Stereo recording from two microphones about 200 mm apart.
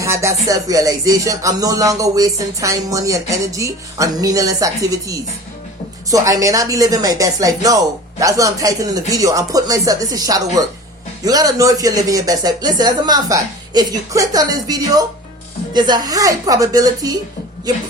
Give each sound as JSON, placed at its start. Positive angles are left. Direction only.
{"t": 0.0, "sound": "speech", "side_deg": -15}